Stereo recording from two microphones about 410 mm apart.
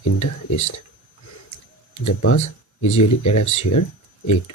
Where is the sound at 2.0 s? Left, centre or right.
Left.